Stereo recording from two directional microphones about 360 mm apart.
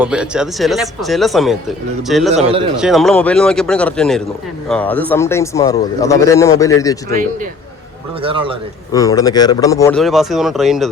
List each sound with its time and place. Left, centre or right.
0.0 s speech: centre
2.3 s speech: centre
2.7 s speech: centre
8.2 s speech: centre
8.9 s speech: centre